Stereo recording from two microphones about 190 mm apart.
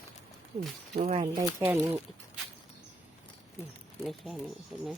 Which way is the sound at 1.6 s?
10° right (ahead or behind).